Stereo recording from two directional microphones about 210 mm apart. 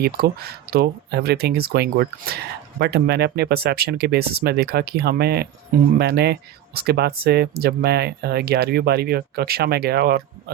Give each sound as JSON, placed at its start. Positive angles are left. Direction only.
{"t": 0.0, "sound": "speech", "side_deg": -50}